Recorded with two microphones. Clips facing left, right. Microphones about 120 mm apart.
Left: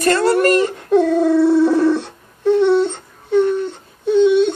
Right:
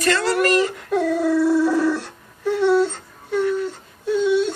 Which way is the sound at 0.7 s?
25° left (ahead or behind).